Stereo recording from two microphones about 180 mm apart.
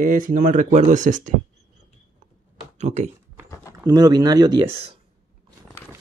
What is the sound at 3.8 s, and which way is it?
Speech, 20° right (ahead or behind).